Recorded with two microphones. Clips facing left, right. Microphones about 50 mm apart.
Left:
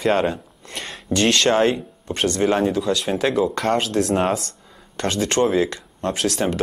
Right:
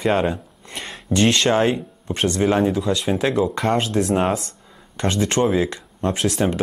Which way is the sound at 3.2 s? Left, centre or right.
Centre.